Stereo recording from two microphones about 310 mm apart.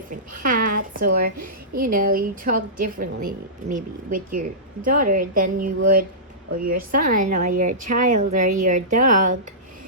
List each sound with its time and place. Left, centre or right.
0.1 s a woman's voice: right